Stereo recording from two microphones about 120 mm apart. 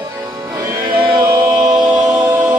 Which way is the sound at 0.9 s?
40° right (ahead or behind).